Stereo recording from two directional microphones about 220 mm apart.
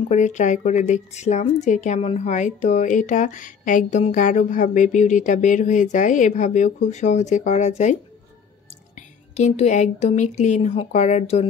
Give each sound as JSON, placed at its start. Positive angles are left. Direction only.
{"t": 0.1, "sound": "a woman's voice", "side_deg": 35}